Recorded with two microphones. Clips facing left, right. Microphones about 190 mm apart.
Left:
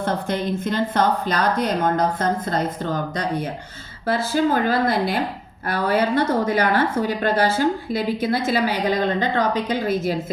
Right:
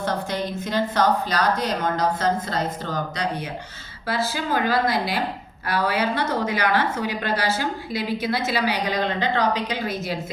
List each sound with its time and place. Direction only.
0.0 s speech: 55° left (ahead or behind)